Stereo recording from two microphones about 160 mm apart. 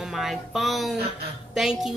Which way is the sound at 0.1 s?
Centre (ahead or behind).